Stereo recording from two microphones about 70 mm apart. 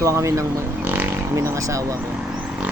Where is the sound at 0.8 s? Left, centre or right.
Right.